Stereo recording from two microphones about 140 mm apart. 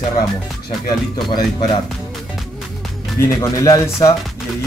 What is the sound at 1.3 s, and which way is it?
Speech, 35° left (ahead or behind).